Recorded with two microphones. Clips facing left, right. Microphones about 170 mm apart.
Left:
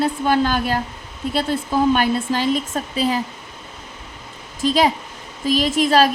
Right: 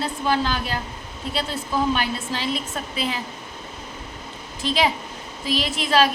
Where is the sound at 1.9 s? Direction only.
50° left (ahead or behind).